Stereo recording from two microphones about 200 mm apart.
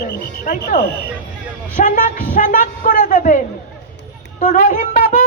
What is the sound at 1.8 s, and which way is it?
Speech, 40° left (ahead or behind).